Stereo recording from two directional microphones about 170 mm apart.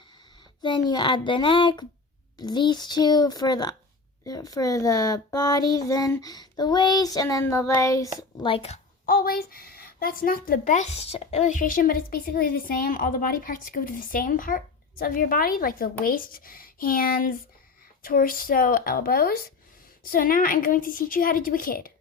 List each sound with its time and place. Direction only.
0.6 s speech: 25° left (ahead or behind)
8.4 s speech: 35° left (ahead or behind)
9.0 s a woman's voice: 60° left (ahead or behind)